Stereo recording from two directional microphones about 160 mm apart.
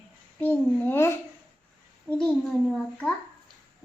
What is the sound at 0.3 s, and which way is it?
A child's voice, 10° left (ahead or behind).